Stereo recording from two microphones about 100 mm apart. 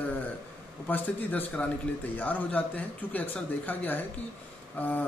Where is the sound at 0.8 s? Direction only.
20° left (ahead or behind).